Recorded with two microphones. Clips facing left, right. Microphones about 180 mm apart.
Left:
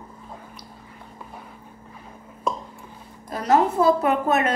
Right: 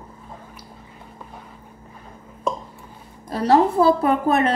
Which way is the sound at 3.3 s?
30° right (ahead or behind).